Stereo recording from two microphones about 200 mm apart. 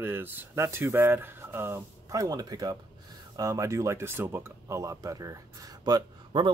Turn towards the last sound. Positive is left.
turn(degrees=-20)  # may be behind; listen again after turning